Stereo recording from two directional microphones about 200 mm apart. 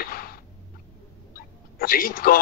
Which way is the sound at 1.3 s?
45° left (ahead or behind).